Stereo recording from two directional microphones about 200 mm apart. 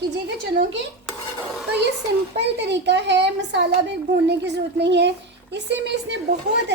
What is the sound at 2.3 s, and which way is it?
A child's voice, 60° right (ahead or behind).